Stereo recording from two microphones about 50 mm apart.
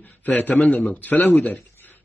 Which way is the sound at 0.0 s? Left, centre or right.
Left.